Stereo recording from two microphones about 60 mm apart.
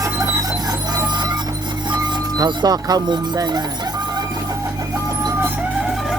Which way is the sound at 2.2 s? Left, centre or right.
Right.